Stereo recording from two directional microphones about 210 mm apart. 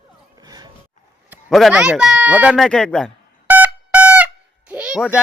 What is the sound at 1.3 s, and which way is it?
Speech, 5° right (ahead or behind).